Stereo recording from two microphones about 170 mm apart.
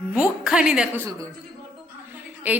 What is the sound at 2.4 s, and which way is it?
Speech, 10° right (ahead or behind).